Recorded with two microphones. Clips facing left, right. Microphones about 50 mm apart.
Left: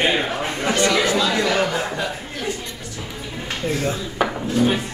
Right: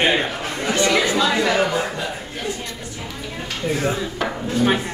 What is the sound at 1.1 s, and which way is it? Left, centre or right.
Speech, centre.